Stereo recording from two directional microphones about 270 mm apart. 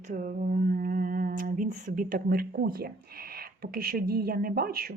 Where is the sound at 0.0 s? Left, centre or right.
Right.